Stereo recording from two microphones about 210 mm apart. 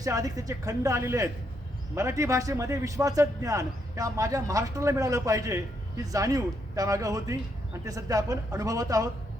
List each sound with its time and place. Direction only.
0.0 s a man's voice: 15° right (ahead or behind)